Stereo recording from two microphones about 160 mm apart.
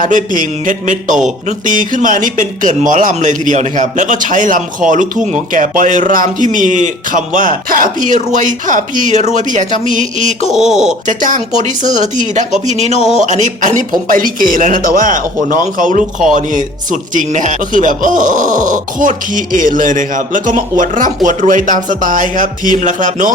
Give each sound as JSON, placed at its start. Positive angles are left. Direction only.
{"t": 0.0, "sound": "speech", "side_deg": -55}
{"t": 10.5, "sound": "speech", "side_deg": 0}
{"t": 11.0, "sound": "a man's voice", "side_deg": -55}